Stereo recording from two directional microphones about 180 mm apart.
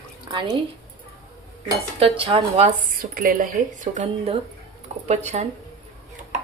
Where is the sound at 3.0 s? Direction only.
50° right (ahead or behind).